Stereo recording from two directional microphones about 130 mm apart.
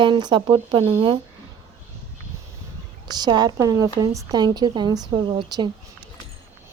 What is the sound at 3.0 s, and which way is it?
A woman's voice, 35° right (ahead or behind).